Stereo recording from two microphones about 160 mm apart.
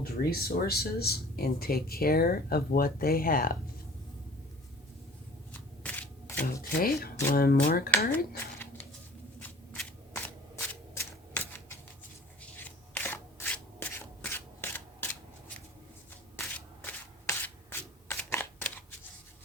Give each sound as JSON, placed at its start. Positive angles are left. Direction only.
{"t": 0.0, "sound": "speech", "side_deg": 75}
{"t": 5.8, "sound": "shuffling cards", "side_deg": 10}
{"t": 6.4, "sound": "speech", "side_deg": 65}
{"t": 10.1, "sound": "a sound", "side_deg": 15}
{"t": 12.4, "sound": "a sound", "side_deg": 10}
{"t": 17.2, "sound": "shuffling cards", "side_deg": 15}